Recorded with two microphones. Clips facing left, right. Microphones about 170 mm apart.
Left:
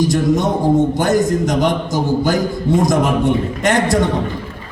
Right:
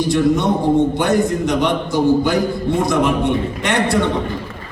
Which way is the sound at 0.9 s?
40° left (ahead or behind).